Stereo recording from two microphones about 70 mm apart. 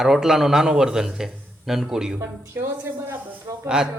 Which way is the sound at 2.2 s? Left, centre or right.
Right.